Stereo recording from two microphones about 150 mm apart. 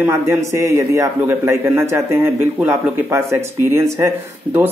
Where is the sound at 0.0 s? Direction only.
20° right (ahead or behind).